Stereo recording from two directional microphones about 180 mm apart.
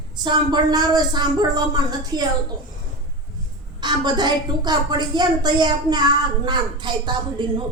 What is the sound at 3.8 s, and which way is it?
A woman's voice, 25° right (ahead or behind).